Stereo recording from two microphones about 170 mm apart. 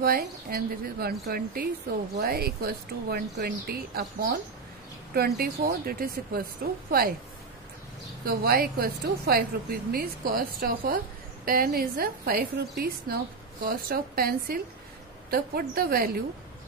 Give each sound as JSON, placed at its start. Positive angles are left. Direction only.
{"t": 0.0, "sound": "a woman's voice", "side_deg": -60}
{"t": 5.1, "sound": "a woman's voice", "side_deg": -65}
{"t": 8.3, "sound": "a woman's voice", "side_deg": -65}